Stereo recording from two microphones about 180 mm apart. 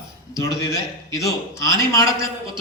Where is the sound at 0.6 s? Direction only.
20° left (ahead or behind).